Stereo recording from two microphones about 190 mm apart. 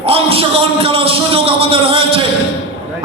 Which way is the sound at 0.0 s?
30° right (ahead or behind).